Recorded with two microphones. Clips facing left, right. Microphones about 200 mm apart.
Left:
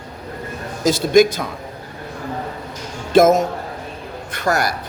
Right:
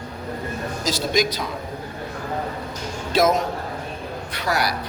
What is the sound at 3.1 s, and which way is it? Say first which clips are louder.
A man's voice: left 7 dB; 50° left (ahead or behind).